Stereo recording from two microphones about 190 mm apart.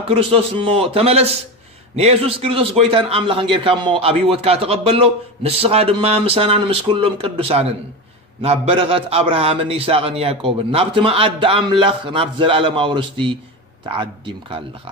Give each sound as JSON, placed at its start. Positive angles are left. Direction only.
{"t": 0.1, "sound": "a man's voice", "side_deg": -30}